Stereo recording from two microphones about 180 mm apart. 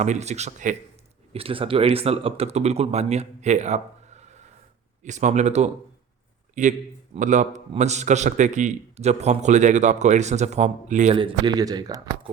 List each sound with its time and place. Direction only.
0.0 s a man's voice: 40° right (ahead or behind)
11.2 s speech: 25° right (ahead or behind)